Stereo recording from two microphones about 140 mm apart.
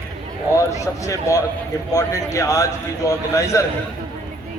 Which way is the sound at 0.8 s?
20° left (ahead or behind).